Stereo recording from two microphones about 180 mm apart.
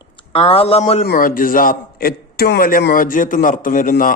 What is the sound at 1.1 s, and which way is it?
A man's voice, 50° left (ahead or behind).